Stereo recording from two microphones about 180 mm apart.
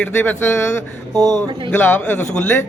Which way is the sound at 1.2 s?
40° left (ahead or behind).